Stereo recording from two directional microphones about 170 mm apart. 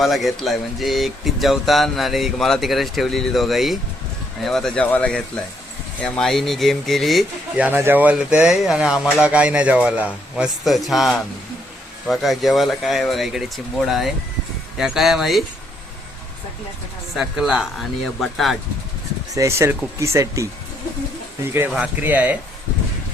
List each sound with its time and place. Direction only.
0.0 s speech: centre (ahead or behind)
17.2 s speech: 5° right (ahead or behind)
19.3 s speech: 15° right (ahead or behind)
21.7 s speech: 5° right (ahead or behind)